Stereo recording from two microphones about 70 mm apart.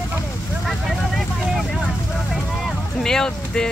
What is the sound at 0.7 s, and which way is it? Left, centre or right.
Vehicle, centre.